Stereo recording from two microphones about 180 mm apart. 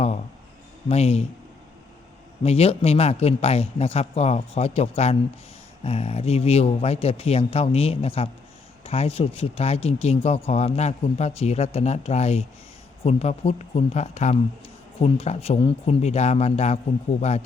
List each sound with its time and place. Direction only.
0.9 s speech: 35° left (ahead or behind)
2.4 s speech: 35° left (ahead or behind)